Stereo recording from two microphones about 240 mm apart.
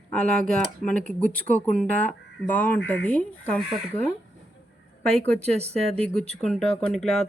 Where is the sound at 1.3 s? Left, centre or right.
Centre.